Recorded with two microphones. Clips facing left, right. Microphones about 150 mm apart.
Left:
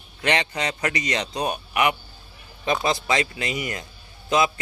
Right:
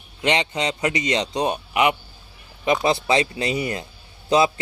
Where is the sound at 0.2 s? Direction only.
20° right (ahead or behind).